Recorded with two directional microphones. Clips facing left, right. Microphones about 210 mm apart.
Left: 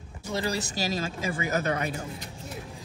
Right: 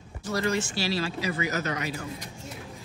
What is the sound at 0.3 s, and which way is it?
Speech, 30° left (ahead or behind).